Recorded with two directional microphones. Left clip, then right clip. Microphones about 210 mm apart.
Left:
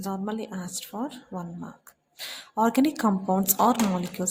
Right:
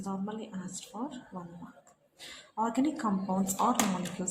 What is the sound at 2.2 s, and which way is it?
A woman's voice, 50° left (ahead or behind).